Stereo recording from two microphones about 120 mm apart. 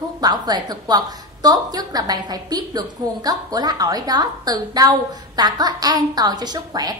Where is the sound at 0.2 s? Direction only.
35° right (ahead or behind).